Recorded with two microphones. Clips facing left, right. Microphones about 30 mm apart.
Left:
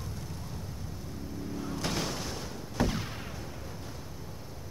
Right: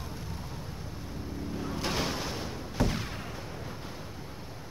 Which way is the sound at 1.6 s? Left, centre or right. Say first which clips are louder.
Right 2 dB; centre.